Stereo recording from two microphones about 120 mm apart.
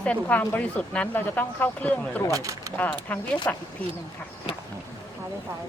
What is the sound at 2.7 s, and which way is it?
Speech, 15° left (ahead or behind).